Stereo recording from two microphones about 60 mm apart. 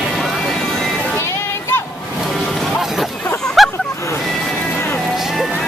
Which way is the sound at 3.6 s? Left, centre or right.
Centre.